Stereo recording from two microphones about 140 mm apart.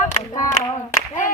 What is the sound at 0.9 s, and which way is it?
Speech, 65° left (ahead or behind).